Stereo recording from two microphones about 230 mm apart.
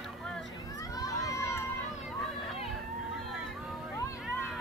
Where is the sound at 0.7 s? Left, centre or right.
Centre.